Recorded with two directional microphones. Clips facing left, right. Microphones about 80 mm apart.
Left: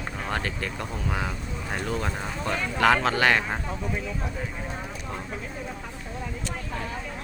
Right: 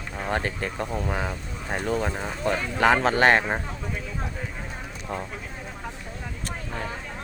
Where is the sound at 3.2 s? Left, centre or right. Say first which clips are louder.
Right 3 dB; right.